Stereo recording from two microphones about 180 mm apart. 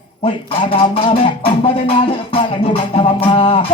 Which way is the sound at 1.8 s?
30° left (ahead or behind).